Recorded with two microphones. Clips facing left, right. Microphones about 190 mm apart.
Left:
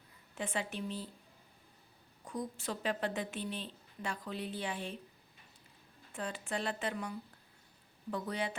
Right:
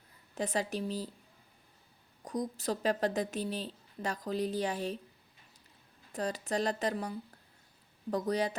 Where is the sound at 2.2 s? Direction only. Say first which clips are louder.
Right 5 dB; 40° right (ahead or behind).